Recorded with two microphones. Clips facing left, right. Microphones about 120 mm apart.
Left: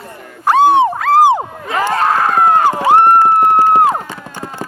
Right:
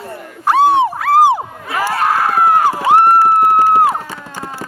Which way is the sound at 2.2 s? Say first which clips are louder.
Even; 25° left (ahead or behind).